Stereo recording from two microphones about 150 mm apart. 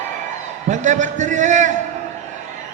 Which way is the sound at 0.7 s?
55° right (ahead or behind).